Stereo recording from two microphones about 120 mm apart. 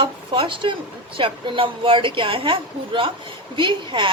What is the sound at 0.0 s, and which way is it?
Speech, 45° right (ahead or behind).